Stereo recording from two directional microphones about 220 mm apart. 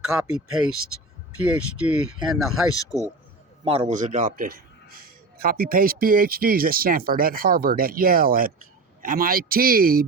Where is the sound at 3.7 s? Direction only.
30° right (ahead or behind).